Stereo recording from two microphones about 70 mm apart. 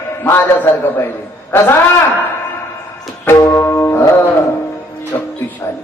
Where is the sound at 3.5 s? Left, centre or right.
Left.